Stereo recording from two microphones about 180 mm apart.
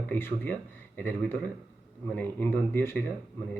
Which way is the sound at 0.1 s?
10° left (ahead or behind).